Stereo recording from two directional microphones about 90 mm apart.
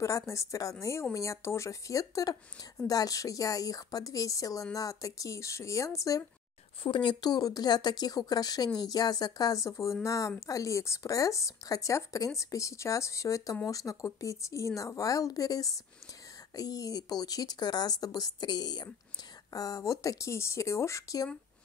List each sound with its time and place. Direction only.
0.0 s speech: 35° left (ahead or behind)
6.8 s speech: 65° left (ahead or behind)
19.5 s speech: 40° left (ahead or behind)